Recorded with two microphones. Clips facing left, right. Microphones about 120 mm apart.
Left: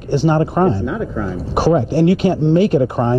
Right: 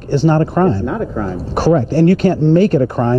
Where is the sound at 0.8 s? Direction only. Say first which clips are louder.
Right 2 dB; centre (ahead or behind).